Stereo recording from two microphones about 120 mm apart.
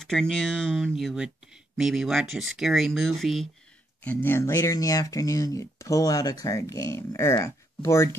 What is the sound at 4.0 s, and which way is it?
Speech, 15° left (ahead or behind).